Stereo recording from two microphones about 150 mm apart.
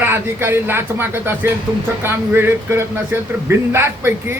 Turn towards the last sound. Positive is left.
turn(degrees=-15)  # may be behind; listen again after turning